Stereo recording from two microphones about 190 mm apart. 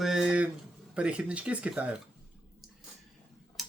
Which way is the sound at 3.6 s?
Centre (ahead or behind).